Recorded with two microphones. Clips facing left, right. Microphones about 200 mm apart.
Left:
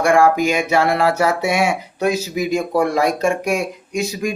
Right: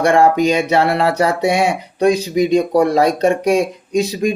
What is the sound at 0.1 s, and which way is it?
Speech, 30° right (ahead or behind).